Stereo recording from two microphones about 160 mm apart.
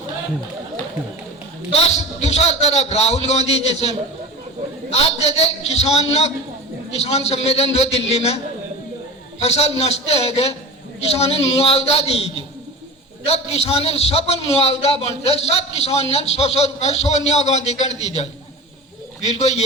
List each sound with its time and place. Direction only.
1.7 s a man's voice: 45° left (ahead or behind)
9.4 s a man's voice: 40° left (ahead or behind)